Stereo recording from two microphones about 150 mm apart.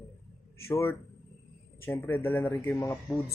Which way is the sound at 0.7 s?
15° left (ahead or behind).